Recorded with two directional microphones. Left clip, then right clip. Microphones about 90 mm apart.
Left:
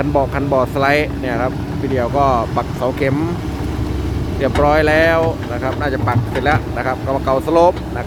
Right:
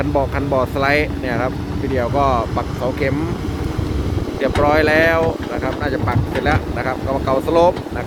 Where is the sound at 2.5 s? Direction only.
35° left (ahead or behind).